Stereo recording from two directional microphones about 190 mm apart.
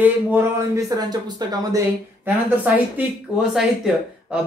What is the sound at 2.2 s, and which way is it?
Speech, 10° right (ahead or behind).